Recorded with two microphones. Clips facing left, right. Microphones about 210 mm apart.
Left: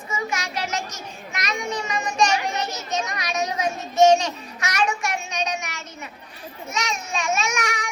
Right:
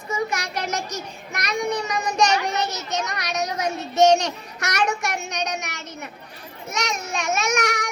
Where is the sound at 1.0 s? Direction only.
60° right (ahead or behind).